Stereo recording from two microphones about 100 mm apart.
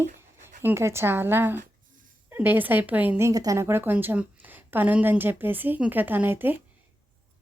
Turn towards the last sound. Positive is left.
turn(degrees=-20)  # may be behind; listen again after turning